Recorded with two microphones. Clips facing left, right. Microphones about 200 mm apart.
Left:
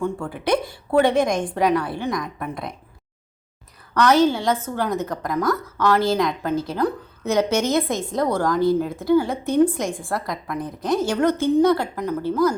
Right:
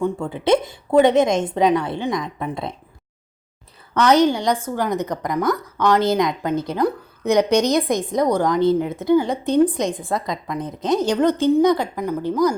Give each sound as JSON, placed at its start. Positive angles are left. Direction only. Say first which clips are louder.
{"t": 0.0, "sound": "a woman's voice", "louder": "right 3 dB", "side_deg": -25}
{"t": 3.9, "sound": "a woman's voice", "louder": "right 1 dB", "side_deg": -20}